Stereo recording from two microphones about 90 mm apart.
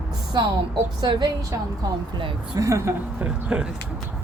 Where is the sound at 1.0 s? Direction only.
55° right (ahead or behind).